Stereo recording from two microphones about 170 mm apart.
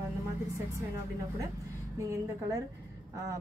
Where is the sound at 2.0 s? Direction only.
20° right (ahead or behind).